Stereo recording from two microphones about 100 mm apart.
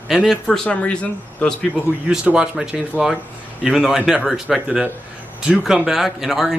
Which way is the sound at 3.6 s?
Centre (ahead or behind).